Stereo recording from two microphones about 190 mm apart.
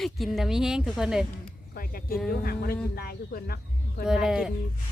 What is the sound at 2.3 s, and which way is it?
Speech, 50° left (ahead or behind).